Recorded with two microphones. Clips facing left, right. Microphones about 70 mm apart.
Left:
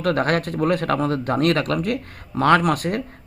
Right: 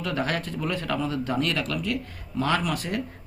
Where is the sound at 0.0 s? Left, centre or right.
Left.